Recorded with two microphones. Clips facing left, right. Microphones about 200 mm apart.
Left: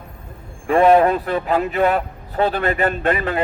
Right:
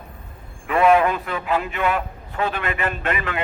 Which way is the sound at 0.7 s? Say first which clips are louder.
Left 4 dB; 35° left (ahead or behind).